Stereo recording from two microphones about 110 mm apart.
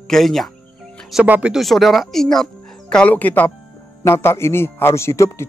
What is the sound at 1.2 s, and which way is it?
A man's voice, 10° right (ahead or behind).